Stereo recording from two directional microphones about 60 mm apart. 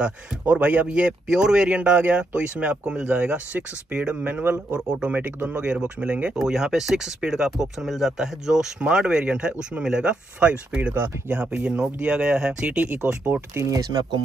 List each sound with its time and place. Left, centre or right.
0.0 s speech: right
6.3 s speech: centre
11.0 s speech: right
13.7 s speech: right